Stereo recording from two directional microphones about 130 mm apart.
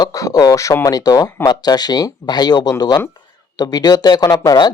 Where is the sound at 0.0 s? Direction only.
25° left (ahead or behind).